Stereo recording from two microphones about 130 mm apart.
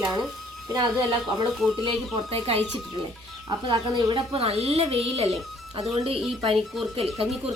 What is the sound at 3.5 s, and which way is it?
Speech, 35° right (ahead or behind).